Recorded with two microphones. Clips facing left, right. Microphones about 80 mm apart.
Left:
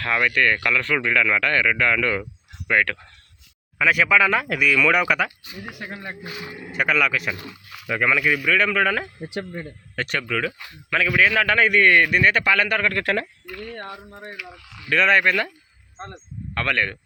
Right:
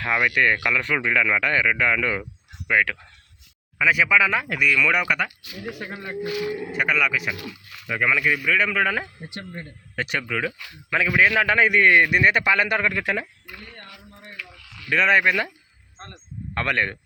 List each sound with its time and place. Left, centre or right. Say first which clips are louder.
0.0 s speech: even; centre
6.7 s speech: left 3 dB; centre
7.7 s speech: left 4 dB; centre
7.9 s speech: left 1 dB; centre
13.9 s speech: left 7 dB; left
14.3 s a sound: left 2 dB; centre
14.8 s speech: left 1 dB; centre
16.6 s speech: even; right